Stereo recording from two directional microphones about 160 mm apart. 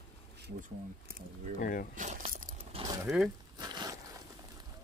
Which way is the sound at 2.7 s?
30° right (ahead or behind).